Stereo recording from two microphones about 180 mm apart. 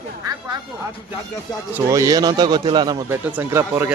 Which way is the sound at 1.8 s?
20° right (ahead or behind).